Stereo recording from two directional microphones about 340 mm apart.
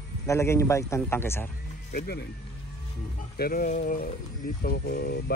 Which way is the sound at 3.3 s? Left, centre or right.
Left.